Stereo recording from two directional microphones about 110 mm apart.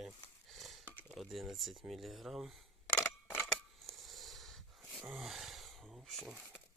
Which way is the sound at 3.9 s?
Centre (ahead or behind).